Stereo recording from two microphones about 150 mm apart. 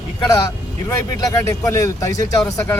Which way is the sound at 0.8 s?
20° left (ahead or behind).